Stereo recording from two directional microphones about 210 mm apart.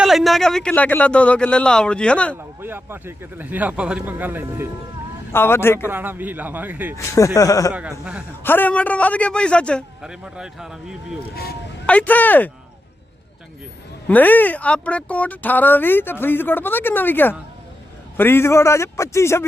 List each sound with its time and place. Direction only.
0.0 s a man's voice: centre (ahead or behind)
2.3 s speech: 10° right (ahead or behind)
5.3 s speech: 10° left (ahead or behind)
5.8 s speech: 10° right (ahead or behind)
7.3 s speech: 15° left (ahead or behind)
7.7 s a man's voice: 5° right (ahead or behind)
8.4 s a man's voice: 10° left (ahead or behind)
11.9 s speech: 5° left (ahead or behind)
14.1 s speech: 10° left (ahead or behind)